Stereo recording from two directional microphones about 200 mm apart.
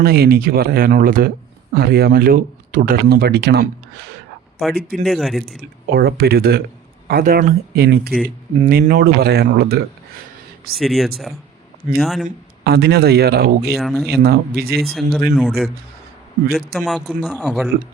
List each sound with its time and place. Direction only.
0.0 s speech: 50° right (ahead or behind)
5.0 s speech: centre (ahead or behind)
5.9 s speech: 50° right (ahead or behind)
8.5 s speech: 40° right (ahead or behind)
10.8 s speech: centre (ahead or behind)
12.6 s speech: 55° right (ahead or behind)
13.7 s speech: centre (ahead or behind)
14.2 s speech: 50° right (ahead or behind)
14.8 s speech: centre (ahead or behind)